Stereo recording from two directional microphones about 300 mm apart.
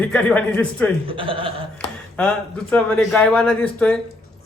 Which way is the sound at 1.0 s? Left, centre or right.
Centre.